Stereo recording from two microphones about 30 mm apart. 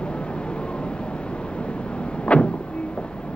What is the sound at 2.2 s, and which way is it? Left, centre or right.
Vehicle, left.